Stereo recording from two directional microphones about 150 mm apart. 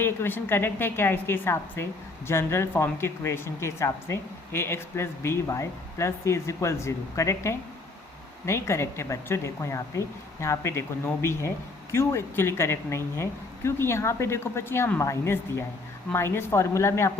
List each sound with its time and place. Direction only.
0.0 s a woman's voice: 15° left (ahead or behind)